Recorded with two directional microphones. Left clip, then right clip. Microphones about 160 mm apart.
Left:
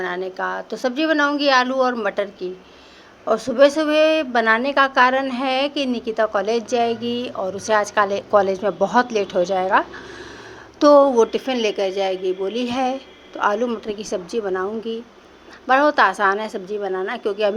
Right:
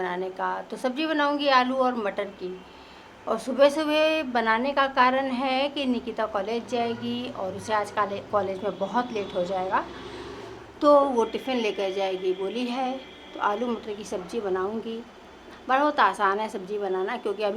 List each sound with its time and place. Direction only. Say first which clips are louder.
0.0 s a woman's voice: left 4 dB; 25° left (ahead or behind)